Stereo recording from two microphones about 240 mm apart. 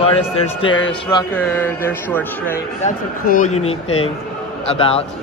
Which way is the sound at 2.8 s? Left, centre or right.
Left.